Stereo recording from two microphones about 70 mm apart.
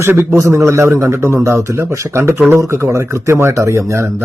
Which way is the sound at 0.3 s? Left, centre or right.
Right.